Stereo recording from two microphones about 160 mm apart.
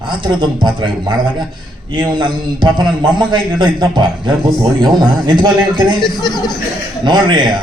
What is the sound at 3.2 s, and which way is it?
A man's voice, 30° right (ahead or behind).